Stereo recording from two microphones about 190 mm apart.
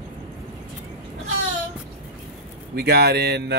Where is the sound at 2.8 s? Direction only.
60° right (ahead or behind).